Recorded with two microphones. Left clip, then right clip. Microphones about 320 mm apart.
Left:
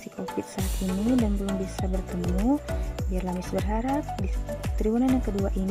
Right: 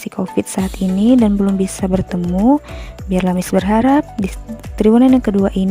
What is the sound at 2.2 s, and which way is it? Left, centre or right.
Speech, centre.